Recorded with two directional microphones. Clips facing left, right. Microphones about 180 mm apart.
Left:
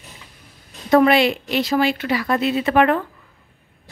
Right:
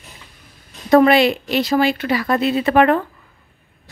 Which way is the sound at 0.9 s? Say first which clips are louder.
Right 2 dB; 40° right (ahead or behind).